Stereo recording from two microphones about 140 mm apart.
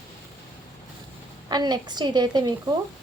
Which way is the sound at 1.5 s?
30° right (ahead or behind).